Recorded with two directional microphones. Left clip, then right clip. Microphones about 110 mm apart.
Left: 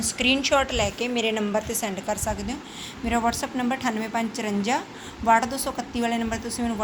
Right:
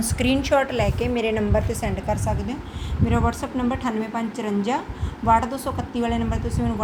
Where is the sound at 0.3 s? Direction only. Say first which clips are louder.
Right 1 dB; 40° right (ahead or behind).